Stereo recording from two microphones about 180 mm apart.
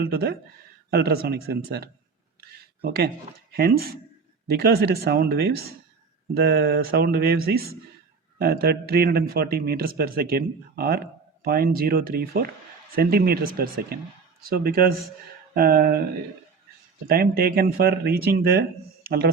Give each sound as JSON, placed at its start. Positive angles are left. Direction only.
{"t": 0.0, "sound": "speech", "side_deg": -60}
{"t": 2.4, "sound": "a sound", "side_deg": -60}
{"t": 3.5, "sound": "speech", "side_deg": -55}
{"t": 17.1, "sound": "a man's voice", "side_deg": -55}